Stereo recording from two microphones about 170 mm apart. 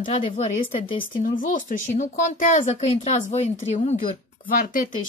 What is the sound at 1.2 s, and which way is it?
Speech, 50° left (ahead or behind).